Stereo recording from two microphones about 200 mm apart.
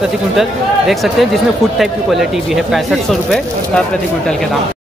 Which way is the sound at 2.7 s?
Centre (ahead or behind).